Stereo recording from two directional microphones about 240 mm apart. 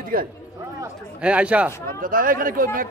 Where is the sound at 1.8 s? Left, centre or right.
Right.